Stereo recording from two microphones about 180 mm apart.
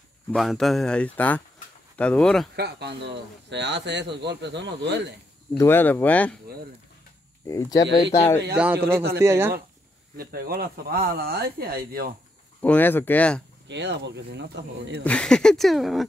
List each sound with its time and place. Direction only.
0.3 s speech: centre (ahead or behind)
2.5 s speech: 65° right (ahead or behind)
5.6 s speech: 10° left (ahead or behind)
7.4 s speech: 15° left (ahead or behind)
9.2 s speech: 15° right (ahead or behind)
10.1 s speech: 55° right (ahead or behind)
12.6 s speech: 10° left (ahead or behind)
13.7 s speech: 75° right (ahead or behind)
15.0 s speech: 5° left (ahead or behind)